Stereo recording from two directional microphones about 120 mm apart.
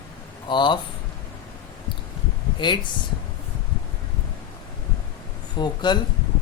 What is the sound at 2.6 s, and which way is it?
Speech, 40° left (ahead or behind).